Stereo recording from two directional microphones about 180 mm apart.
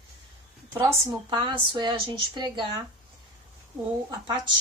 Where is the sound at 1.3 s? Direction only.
25° right (ahead or behind).